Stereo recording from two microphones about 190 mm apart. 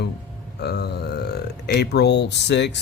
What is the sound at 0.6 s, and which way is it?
A man's voice, 60° left (ahead or behind).